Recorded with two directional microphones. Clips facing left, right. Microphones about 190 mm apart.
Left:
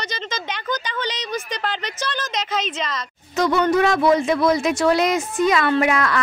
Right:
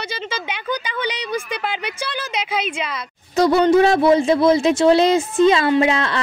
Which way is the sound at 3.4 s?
35° right (ahead or behind).